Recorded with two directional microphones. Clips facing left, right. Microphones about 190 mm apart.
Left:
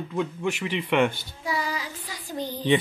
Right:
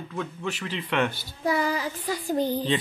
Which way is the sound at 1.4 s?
55° right (ahead or behind).